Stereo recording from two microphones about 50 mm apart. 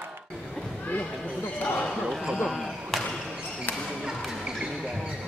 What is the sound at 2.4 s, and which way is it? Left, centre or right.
Basketball bounce, centre.